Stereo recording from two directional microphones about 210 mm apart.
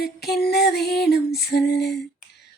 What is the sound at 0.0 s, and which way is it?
Female singing, 50° left (ahead or behind).